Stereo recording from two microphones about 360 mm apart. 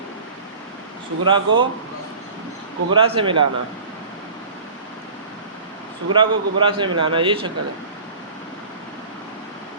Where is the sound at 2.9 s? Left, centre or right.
Centre.